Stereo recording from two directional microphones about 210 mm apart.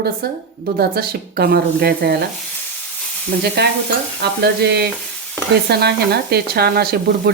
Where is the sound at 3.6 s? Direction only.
50° right (ahead or behind).